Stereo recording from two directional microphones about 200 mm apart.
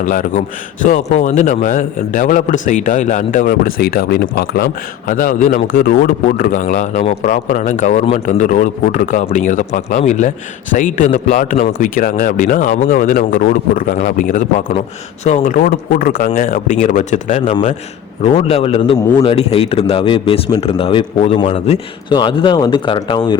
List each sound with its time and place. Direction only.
0.0 s speech: 40° left (ahead or behind); by 23.4 s 25° left (ahead or behind)